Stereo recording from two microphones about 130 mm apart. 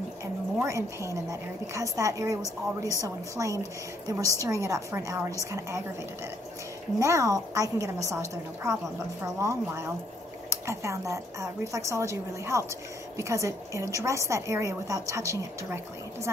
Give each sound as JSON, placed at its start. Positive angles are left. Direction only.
{"t": 0.6, "sound": "a woman's voice", "side_deg": -25}
{"t": 7.0, "sound": "a woman's voice", "side_deg": -25}